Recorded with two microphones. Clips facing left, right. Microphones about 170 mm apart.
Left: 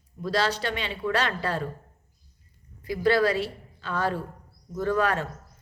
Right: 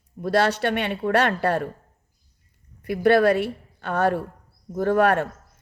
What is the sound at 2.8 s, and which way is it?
A woman's voice, 60° right (ahead or behind).